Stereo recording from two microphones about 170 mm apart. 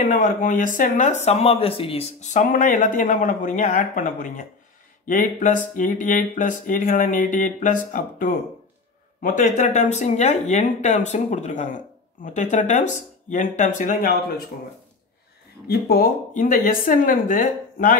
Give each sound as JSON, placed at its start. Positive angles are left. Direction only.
{"t": 0.0, "sound": "speech", "side_deg": 50}
{"t": 15.6, "sound": "speech", "side_deg": 65}